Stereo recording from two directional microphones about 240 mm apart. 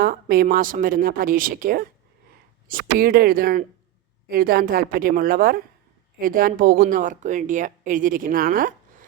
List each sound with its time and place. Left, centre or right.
0.0 s speech: right